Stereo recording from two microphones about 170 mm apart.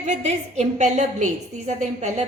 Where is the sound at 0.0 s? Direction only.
40° right (ahead or behind).